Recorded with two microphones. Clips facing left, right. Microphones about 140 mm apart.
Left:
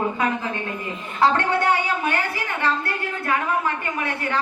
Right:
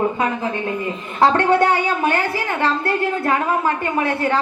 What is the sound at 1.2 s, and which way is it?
A woman's voice, 40° right (ahead or behind).